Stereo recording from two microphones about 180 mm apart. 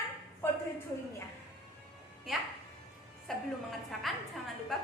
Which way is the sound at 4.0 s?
Centre (ahead or behind).